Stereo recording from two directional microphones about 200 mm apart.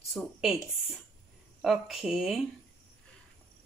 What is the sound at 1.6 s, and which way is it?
Speech, centre (ahead or behind).